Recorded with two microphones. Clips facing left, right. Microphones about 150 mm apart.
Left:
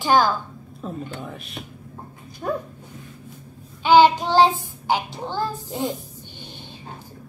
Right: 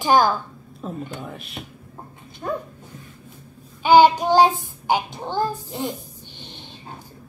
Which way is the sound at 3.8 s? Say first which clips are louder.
Right 1 dB; 15° right (ahead or behind).